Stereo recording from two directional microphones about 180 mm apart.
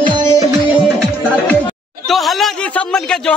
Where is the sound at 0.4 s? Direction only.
15° right (ahead or behind).